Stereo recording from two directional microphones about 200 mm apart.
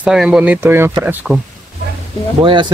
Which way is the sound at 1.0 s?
5° right (ahead or behind).